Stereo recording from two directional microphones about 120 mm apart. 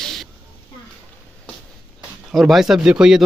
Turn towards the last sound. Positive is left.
turn(degrees=-5)  # may be behind; listen again after turning